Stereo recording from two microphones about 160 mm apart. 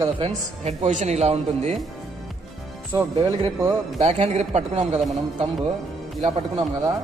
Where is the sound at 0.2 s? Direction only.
50° right (ahead or behind).